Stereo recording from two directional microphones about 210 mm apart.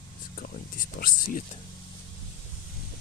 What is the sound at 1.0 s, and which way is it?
Speech, 40° left (ahead or behind).